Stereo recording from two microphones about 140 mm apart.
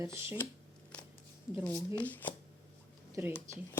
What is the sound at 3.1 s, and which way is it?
Speech, 15° right (ahead or behind).